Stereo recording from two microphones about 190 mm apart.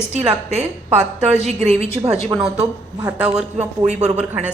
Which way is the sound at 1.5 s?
35° right (ahead or behind).